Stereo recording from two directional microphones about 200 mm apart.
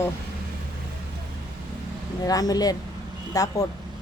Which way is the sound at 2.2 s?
20° left (ahead or behind).